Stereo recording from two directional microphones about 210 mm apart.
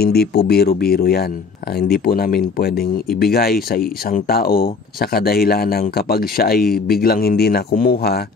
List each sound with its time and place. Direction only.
0.0 s speech: 50° left (ahead or behind)